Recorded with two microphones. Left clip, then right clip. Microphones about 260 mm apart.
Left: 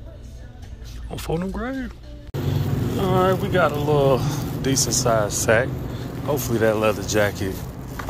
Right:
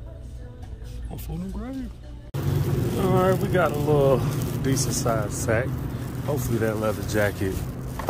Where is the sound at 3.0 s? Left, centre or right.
Centre.